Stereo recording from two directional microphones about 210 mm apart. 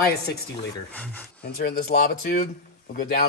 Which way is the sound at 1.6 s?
45° left (ahead or behind).